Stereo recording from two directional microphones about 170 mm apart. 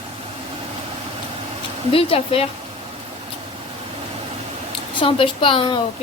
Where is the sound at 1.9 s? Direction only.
35° left (ahead or behind).